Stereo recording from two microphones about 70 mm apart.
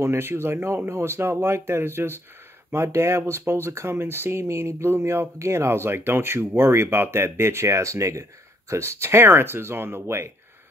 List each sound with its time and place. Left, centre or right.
0.0 s speech: right